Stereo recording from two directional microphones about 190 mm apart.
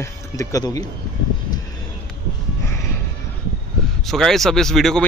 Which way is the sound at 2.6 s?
15° left (ahead or behind).